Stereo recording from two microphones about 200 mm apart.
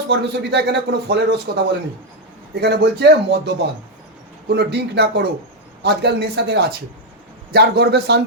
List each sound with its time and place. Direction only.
0.1 s a man's voice: 55° right (ahead or behind)